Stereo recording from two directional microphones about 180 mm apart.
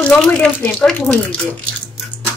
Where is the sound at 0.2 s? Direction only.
5° left (ahead or behind).